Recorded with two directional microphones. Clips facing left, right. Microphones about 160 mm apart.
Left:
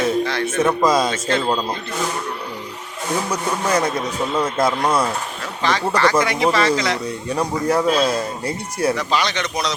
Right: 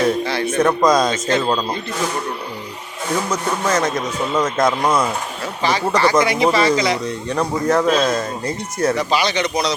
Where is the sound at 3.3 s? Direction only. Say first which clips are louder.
Even; 15° left (ahead or behind).